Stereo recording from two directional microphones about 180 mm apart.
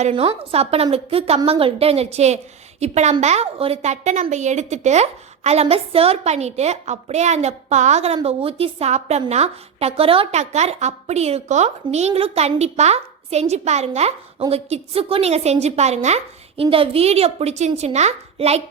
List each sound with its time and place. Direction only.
0.0 s a woman's voice: 35° right (ahead or behind)